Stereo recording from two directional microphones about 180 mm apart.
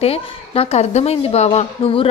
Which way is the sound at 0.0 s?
35° left (ahead or behind).